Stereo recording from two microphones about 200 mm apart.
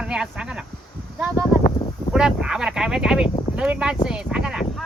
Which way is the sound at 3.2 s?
25° left (ahead or behind).